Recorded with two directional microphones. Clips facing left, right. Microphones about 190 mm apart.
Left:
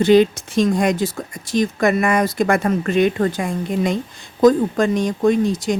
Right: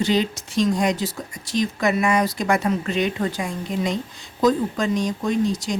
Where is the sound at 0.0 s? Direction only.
55° left (ahead or behind).